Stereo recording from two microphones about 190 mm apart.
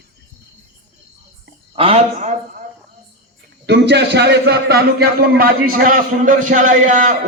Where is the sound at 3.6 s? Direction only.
65° right (ahead or behind); by 7.1 s 45° right (ahead or behind).